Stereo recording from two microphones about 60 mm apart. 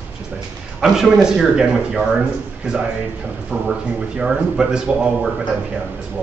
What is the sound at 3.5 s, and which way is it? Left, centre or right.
Speech, right.